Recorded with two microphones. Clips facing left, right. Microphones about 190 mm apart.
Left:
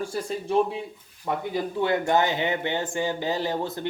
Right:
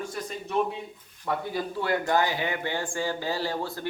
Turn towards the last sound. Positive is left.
turn(degrees=20)  # may be behind; listen again after turning